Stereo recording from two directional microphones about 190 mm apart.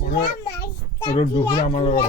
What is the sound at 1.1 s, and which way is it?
Speech, 25° left (ahead or behind).